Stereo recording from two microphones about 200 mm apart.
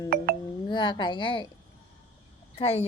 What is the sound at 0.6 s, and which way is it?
Speech, 25° left (ahead or behind).